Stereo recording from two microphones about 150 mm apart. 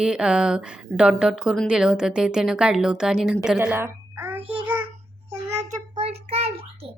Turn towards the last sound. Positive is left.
turn(degrees=-40)  # may be behind; listen again after turning